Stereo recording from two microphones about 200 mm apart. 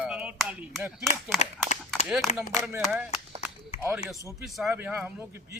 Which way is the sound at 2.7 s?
10° right (ahead or behind).